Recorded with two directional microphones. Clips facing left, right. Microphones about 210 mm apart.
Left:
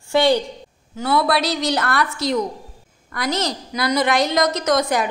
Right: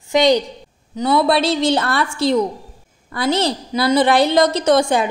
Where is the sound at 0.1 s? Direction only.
15° right (ahead or behind).